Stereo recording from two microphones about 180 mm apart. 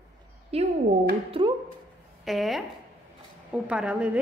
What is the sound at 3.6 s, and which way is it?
Speech, 5° right (ahead or behind).